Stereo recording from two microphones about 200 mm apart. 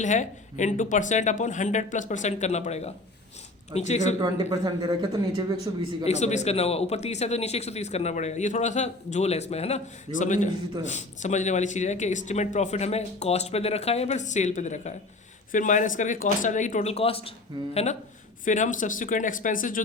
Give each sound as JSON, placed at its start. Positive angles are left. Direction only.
{"t": 0.0, "sound": "speech", "side_deg": 40}
{"t": 4.2, "sound": "speech", "side_deg": -20}
{"t": 6.1, "sound": "speech", "side_deg": 35}
{"t": 17.5, "sound": "speech", "side_deg": -25}
{"t": 18.4, "sound": "speech", "side_deg": 40}